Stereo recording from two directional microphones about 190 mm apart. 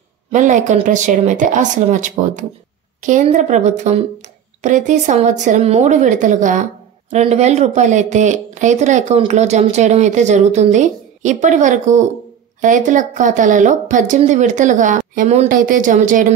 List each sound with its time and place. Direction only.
0.3 s a woman's voice: 40° right (ahead or behind)